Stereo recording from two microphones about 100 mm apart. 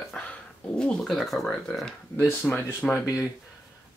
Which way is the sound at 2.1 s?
25° left (ahead or behind).